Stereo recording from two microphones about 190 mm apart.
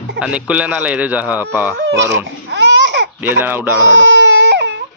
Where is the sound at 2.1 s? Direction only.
65° right (ahead or behind).